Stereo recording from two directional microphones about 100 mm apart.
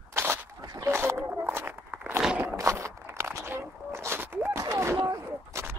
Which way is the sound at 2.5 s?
30° right (ahead or behind).